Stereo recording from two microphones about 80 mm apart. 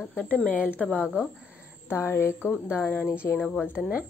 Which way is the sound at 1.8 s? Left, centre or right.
Left.